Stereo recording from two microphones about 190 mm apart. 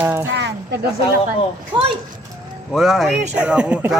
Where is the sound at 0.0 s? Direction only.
15° right (ahead or behind).